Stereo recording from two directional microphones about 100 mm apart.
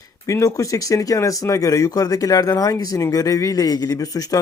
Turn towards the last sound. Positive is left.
turn(degrees=40)  # may be behind; listen again after turning